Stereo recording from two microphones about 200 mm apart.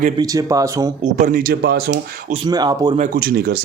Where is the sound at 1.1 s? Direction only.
40° right (ahead or behind).